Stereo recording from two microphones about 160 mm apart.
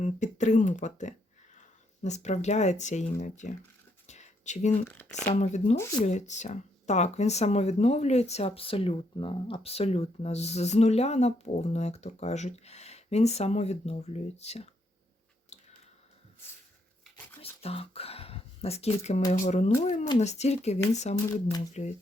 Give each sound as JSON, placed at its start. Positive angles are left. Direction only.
{"t": 0.0, "sound": "speech", "side_deg": 50}
{"t": 4.0, "sound": "a sound", "side_deg": 45}
{"t": 4.9, "sound": "speech", "side_deg": 10}
{"t": 5.3, "sound": "speech", "side_deg": 45}
{"t": 17.4, "sound": "a sound", "side_deg": 40}
{"t": 19.4, "sound": "speech", "side_deg": 45}